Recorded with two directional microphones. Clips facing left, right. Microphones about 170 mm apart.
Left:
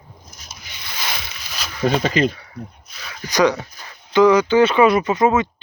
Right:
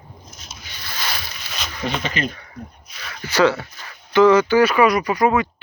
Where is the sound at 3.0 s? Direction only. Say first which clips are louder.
Even; 15° left (ahead or behind).